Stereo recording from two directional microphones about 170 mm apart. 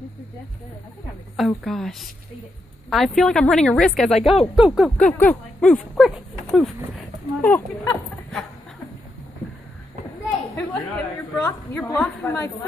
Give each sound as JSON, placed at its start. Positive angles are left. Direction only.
{"t": 1.3, "sound": "a woman's voice", "side_deg": 0}
{"t": 4.2, "sound": "speech", "side_deg": 35}
{"t": 4.6, "sound": "a woman's voice", "side_deg": -5}
{"t": 4.9, "sound": "speech", "side_deg": 10}
{"t": 7.4, "sound": "speech", "side_deg": 10}
{"t": 10.7, "sound": "a woman's voice", "side_deg": 10}